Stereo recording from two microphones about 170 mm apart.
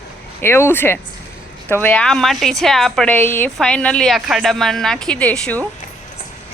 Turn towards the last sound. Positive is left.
turn(degrees=5)  # may be behind; listen again after turning